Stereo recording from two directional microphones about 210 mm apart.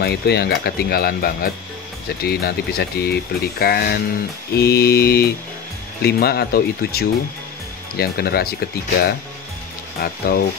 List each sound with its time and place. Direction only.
0.0 s speech: 50° left (ahead or behind)
9.9 s speech: 45° left (ahead or behind)